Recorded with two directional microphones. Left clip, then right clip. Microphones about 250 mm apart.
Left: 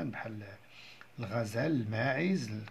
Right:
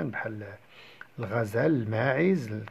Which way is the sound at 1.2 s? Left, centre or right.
Right.